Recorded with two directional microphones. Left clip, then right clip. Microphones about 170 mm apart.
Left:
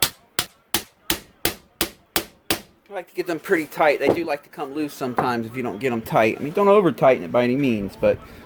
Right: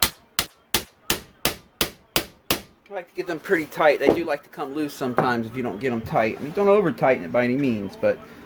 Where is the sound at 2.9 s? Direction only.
50° left (ahead or behind).